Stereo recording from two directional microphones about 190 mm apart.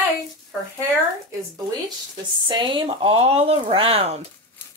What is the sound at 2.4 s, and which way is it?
Speech, 25° right (ahead or behind).